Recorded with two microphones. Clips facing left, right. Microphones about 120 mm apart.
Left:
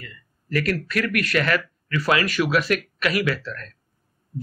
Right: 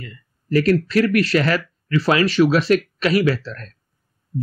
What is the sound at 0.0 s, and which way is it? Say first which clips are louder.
Speech: right 5 dB; 30° right (ahead or behind).